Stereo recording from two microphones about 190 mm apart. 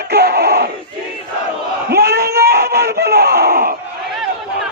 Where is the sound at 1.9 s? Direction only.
55° right (ahead or behind).